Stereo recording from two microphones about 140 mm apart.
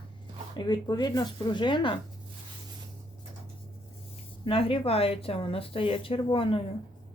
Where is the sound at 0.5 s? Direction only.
30° left (ahead or behind).